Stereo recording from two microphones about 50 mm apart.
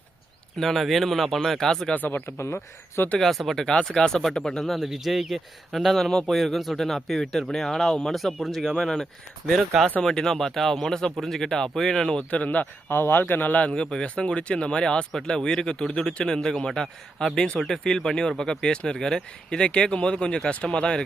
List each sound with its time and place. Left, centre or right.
0.6 s speech: centre
2.0 s speech: left
2.4 s speech: left
3.2 s speech: centre
4.8 s speech: centre
12.3 s speech: left
12.9 s speech: left
13.6 s speech: left